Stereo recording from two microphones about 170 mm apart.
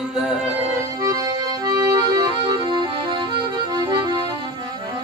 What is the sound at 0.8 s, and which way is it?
Accordion, 20° right (ahead or behind).